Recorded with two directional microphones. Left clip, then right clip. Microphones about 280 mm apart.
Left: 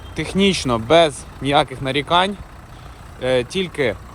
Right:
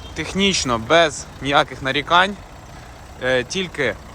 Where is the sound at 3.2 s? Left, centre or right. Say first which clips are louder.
Left 1 dB; centre.